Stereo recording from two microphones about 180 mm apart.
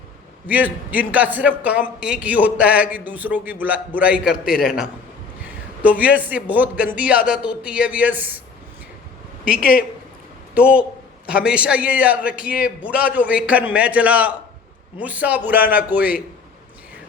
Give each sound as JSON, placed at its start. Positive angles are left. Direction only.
{"t": 0.4, "sound": "a man's voice", "side_deg": -10}
{"t": 9.6, "sound": "speech", "side_deg": 55}
{"t": 10.5, "sound": "a man's voice", "side_deg": -5}